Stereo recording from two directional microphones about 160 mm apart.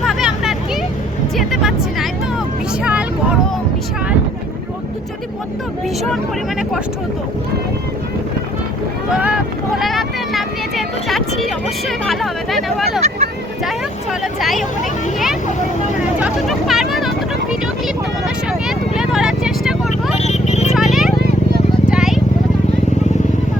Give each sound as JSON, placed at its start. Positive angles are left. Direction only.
{"t": 0.0, "sound": "vehicle", "side_deg": 0}
{"t": 1.4, "sound": "music", "side_deg": 0}
{"t": 2.8, "sound": "vehicle", "side_deg": -10}
{"t": 9.1, "sound": "vehicle", "side_deg": -5}
{"t": 13.7, "sound": "speech", "side_deg": 0}
{"t": 16.2, "sound": "speech", "side_deg": 0}
{"t": 18.7, "sound": "vehicle", "side_deg": -5}
{"t": 20.1, "sound": "vehicle", "side_deg": 45}
{"t": 20.7, "sound": "a sound", "side_deg": 0}
{"t": 21.2, "sound": "a sound", "side_deg": -90}
{"t": 21.8, "sound": "vehicle", "side_deg": -5}